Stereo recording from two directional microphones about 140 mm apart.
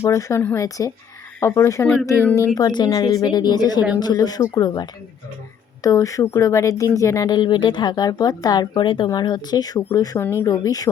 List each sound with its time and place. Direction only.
0.0 s speech: 20° left (ahead or behind)
2.6 s speech: 30° left (ahead or behind)